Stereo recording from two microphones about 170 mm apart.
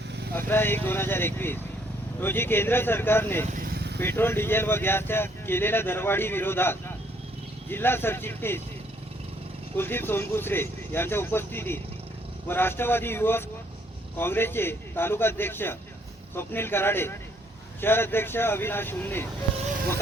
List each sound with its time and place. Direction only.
0.3 s speech: 15° left (ahead or behind)
3.5 s vehicle: 60° right (ahead or behind)
4.0 s speech: 10° left (ahead or behind)
9.7 s speech: 15° left (ahead or behind)